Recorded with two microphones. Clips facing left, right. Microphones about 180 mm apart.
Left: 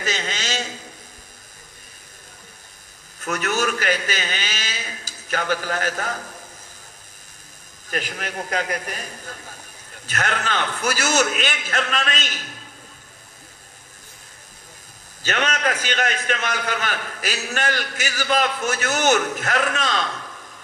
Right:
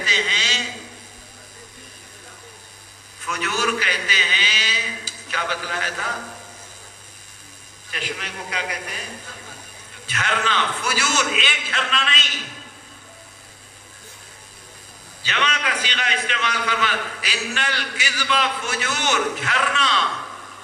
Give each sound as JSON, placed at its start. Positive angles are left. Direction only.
{"t": 0.0, "sound": "a sound", "side_deg": 45}
{"t": 3.2, "sound": "a man's voice", "side_deg": 45}
{"t": 7.9, "sound": "a man's voice", "side_deg": 45}
{"t": 15.2, "sound": "a man's voice", "side_deg": 45}